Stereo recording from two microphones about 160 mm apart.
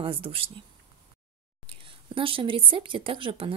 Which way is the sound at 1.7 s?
35° right (ahead or behind).